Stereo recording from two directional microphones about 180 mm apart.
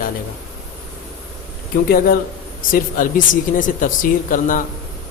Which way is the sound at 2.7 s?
50° left (ahead or behind).